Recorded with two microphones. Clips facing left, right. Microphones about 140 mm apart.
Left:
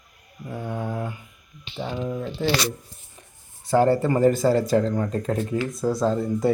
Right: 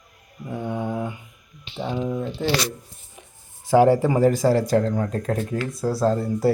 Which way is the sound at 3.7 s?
10° right (ahead or behind).